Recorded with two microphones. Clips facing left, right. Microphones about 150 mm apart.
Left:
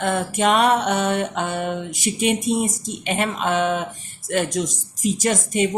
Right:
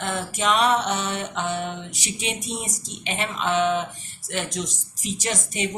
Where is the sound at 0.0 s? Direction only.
50° left (ahead or behind).